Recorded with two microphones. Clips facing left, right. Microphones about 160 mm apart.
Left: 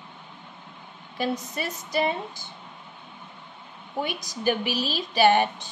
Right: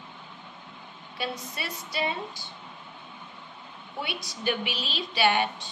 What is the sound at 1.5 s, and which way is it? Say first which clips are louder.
Speech: left 7 dB; 45° left (ahead or behind).